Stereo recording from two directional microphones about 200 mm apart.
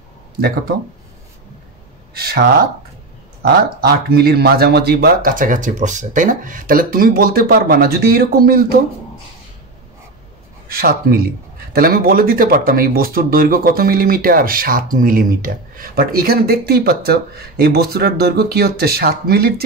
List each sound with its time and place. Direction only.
2.1 s speech: 50° right (ahead or behind)
10.7 s speech: 50° right (ahead or behind)